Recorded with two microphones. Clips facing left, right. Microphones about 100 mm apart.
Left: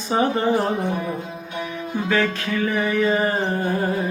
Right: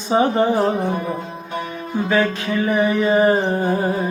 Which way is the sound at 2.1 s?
20° right (ahead or behind).